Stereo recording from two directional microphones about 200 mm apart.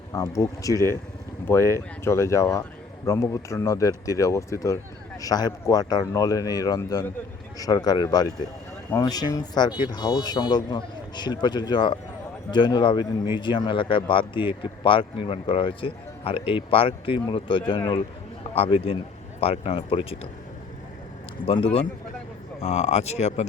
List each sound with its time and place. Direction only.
0.1 s speech: 15° left (ahead or behind)
21.4 s speech: 25° left (ahead or behind)